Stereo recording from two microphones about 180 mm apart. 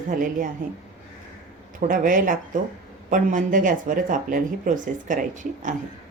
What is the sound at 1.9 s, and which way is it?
Speech, 50° right (ahead or behind).